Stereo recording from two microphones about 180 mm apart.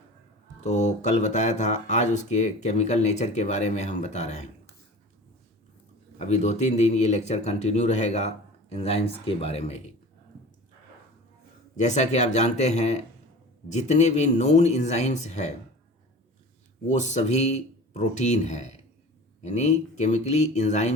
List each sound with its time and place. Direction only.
0.6 s speech: 40° left (ahead or behind)
6.1 s speech: 40° left (ahead or behind)
11.8 s speech: 40° left (ahead or behind)
16.8 s speech: 40° left (ahead or behind)